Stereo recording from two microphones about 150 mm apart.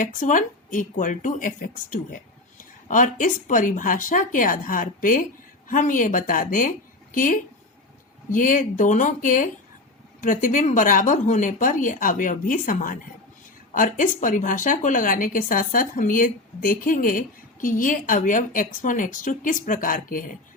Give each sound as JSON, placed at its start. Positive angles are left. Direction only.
{"t": 0.0, "sound": "a woman's voice", "side_deg": 55}